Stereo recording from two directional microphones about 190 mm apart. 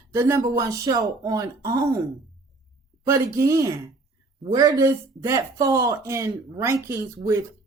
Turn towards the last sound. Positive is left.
turn(degrees=-15)  # may be behind; listen again after turning